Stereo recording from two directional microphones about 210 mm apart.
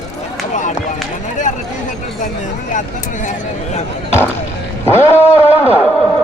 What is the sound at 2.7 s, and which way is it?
Speech, 35° left (ahead or behind).